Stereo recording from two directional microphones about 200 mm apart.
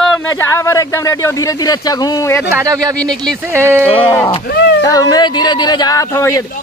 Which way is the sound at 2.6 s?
15° right (ahead or behind).